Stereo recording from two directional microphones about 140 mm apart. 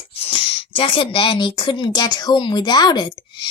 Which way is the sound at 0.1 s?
40° left (ahead or behind).